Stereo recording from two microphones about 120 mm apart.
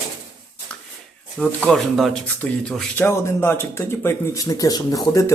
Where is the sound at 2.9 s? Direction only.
20° left (ahead or behind).